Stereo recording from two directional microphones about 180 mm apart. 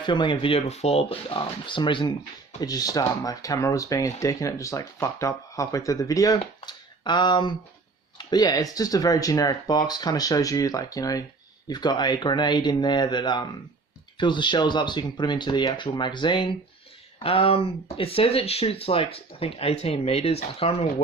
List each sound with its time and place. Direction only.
0.0 s speech: 25° left (ahead or behind)